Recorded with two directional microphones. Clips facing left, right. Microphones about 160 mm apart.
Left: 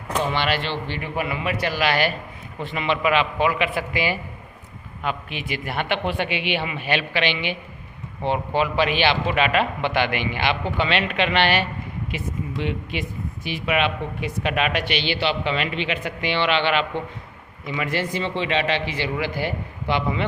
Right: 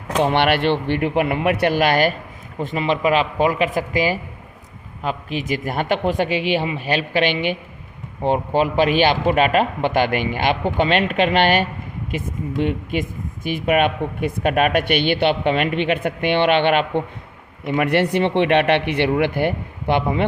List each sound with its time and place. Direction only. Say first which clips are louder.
0.2 s a man's voice: right 7 dB; 60° right (ahead or behind)